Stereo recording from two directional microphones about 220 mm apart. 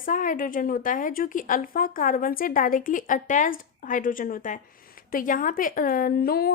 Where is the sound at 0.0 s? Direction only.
35° left (ahead or behind).